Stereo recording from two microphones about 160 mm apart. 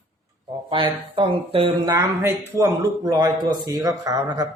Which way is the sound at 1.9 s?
15° right (ahead or behind).